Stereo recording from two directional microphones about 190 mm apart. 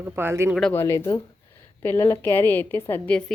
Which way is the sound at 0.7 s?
10° left (ahead or behind).